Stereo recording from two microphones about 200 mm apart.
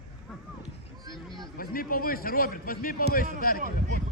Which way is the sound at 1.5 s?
45° left (ahead or behind).